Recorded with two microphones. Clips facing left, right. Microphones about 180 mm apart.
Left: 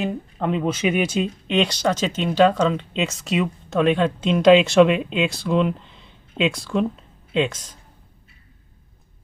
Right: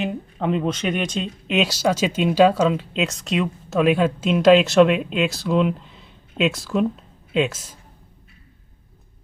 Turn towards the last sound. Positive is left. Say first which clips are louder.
# right 1 dB
turn(degrees=-5)  # may be behind; listen again after turning